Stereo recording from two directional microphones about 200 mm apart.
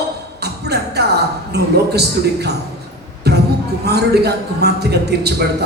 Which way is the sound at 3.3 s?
55° right (ahead or behind).